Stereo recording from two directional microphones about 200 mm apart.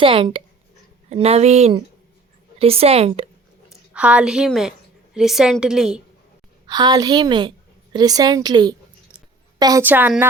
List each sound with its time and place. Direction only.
0.0 s a woman's voice: 25° right (ahead or behind)
3.7 s a woman's voice: 5° right (ahead or behind)
6.7 s a woman's voice: 20° right (ahead or behind)